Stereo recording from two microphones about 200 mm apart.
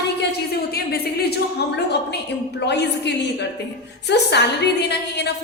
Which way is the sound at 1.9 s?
55° left (ahead or behind).